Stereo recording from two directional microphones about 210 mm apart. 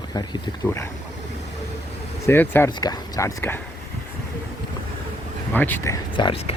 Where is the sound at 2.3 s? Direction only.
10° left (ahead or behind).